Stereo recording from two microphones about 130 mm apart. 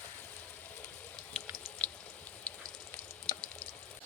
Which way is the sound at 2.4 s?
15° left (ahead or behind).